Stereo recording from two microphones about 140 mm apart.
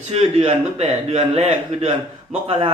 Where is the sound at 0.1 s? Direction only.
45° right (ahead or behind).